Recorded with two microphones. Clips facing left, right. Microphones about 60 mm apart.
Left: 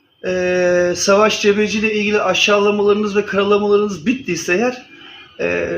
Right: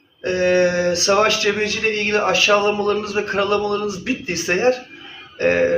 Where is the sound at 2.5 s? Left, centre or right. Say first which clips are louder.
Left 3 dB; centre.